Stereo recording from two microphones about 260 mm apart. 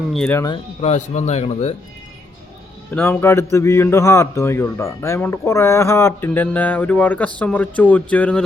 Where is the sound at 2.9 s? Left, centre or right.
Centre.